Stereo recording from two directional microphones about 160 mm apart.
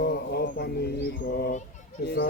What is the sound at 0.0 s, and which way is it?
Bird, 90° left.